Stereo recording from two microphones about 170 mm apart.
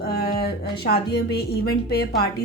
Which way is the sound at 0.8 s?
70° left (ahead or behind).